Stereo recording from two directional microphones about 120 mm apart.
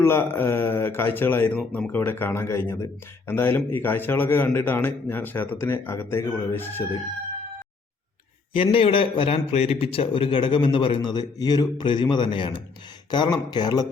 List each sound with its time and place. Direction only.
0.0 s a man's voice: 20° left (ahead or behind)
8.5 s speech: 50° left (ahead or behind)